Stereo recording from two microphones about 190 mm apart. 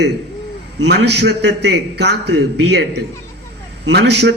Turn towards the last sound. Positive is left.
turn(degrees=-60)  # may be behind; listen again after turning